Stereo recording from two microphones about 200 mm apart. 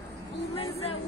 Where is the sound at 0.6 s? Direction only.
30° left (ahead or behind).